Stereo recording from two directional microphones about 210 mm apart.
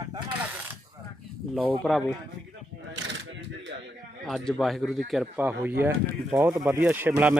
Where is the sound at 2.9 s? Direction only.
60° right (ahead or behind).